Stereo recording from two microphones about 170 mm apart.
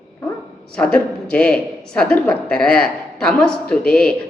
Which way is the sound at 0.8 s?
5° left (ahead or behind).